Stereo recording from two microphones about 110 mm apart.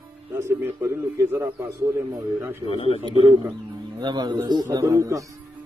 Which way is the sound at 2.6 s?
60° left (ahead or behind).